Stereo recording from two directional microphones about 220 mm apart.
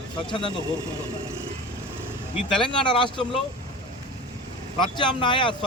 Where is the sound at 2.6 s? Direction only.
20° left (ahead or behind).